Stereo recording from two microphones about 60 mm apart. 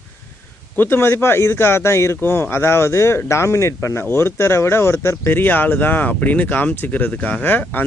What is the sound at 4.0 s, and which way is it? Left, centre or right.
Speech, left.